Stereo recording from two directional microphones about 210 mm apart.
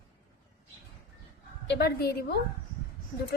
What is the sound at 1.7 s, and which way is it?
Speech, 50° left (ahead or behind).